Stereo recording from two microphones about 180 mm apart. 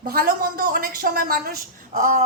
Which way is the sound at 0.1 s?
55° right (ahead or behind).